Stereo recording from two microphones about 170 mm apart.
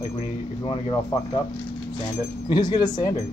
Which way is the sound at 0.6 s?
35° left (ahead or behind).